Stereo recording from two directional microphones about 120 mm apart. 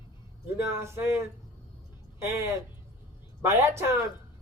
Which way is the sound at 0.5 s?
20° right (ahead or behind).